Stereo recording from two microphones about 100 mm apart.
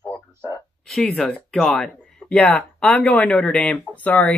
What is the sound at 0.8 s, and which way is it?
Speech, 5° left (ahead or behind).